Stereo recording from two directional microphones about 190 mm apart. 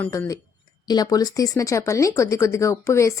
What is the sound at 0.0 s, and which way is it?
Speech, 15° left (ahead or behind).